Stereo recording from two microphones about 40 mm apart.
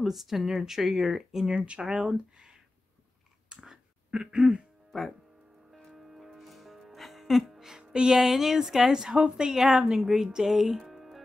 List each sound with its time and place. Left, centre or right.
0.0 s speech: centre
1.5 s speech: right
3.4 s a sound: centre
5.9 s music: centre
7.7 s music: centre
8.2 s speech: centre